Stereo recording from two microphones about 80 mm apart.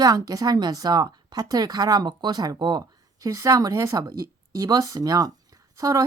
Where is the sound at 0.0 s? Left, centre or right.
Right.